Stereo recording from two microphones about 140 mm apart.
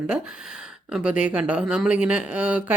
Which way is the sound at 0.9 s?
5° right (ahead or behind).